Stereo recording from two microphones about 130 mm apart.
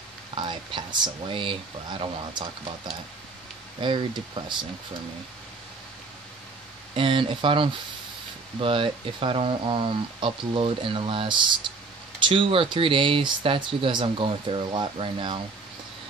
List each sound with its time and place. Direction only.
0.3 s speech: 40° right (ahead or behind)
3.8 s speech: 40° right (ahead or behind)
6.9 s speech: 40° right (ahead or behind)